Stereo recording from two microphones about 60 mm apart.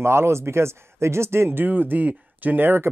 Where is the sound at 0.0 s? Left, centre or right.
Right.